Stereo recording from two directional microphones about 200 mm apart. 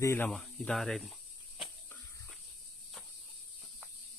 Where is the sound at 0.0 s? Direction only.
10° left (ahead or behind).